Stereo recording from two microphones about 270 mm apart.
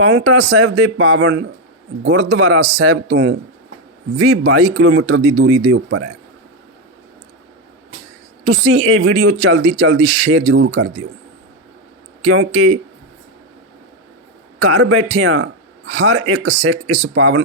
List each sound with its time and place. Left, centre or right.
0.0 s speech: right
8.4 s speech: right
12.2 s speech: right
14.6 s speech: right